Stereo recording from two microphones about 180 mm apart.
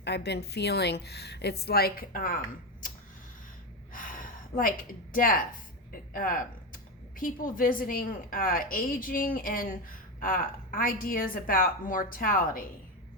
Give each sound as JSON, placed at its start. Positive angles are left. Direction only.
{"t": 0.0, "sound": "a woman's voice", "side_deg": 70}
{"t": 3.9, "sound": "a sound", "side_deg": 50}
{"t": 5.1, "sound": "a woman's voice", "side_deg": 50}
{"t": 10.8, "sound": "a woman's voice", "side_deg": 50}